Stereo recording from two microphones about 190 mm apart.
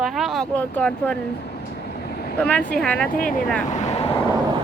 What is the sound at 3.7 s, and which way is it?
Vehicle, 35° left (ahead or behind).